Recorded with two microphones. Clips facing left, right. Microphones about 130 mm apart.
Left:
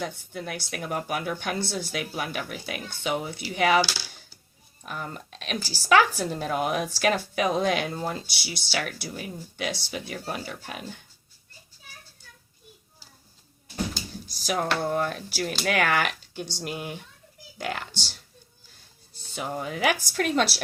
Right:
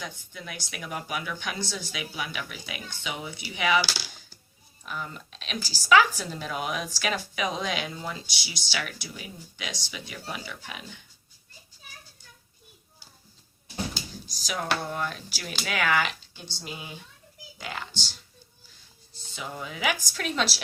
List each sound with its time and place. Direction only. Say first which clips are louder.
0.0 s speech: left 7 dB; 50° left (ahead or behind)
4.8 s speech: left 1 dB; 45° left (ahead or behind)
14.4 s speech: left 4 dB; 50° left (ahead or behind)
19.3 s speech: left 6 dB; 55° left (ahead or behind)